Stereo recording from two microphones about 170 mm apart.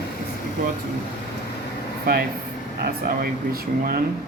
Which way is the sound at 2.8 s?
60° right (ahead or behind).